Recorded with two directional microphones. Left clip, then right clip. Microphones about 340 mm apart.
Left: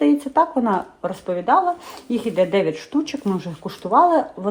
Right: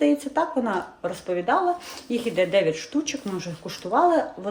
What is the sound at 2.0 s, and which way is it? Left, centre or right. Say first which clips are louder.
A woman's voice: left 4 dB; centre.